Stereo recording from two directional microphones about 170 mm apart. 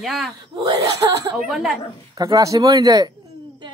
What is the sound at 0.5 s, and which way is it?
Speech, 25° right (ahead or behind).